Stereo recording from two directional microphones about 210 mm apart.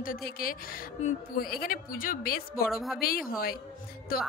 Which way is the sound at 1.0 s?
45° left (ahead or behind).